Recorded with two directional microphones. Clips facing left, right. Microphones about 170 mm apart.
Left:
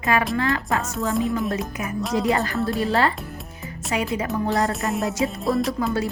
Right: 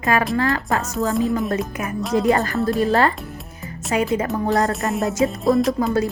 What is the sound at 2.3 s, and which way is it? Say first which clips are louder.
A woman's voice: right 3 dB; 45° right (ahead or behind).